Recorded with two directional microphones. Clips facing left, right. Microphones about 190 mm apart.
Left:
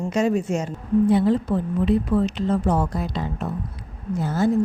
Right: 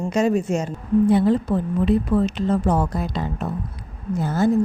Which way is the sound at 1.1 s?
50° right (ahead or behind).